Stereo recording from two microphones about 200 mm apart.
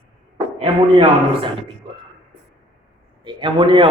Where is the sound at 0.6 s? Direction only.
25° right (ahead or behind).